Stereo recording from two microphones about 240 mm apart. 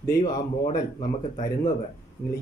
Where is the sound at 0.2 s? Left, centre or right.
Left.